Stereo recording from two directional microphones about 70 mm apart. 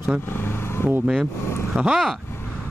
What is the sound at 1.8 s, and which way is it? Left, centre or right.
Speech, centre.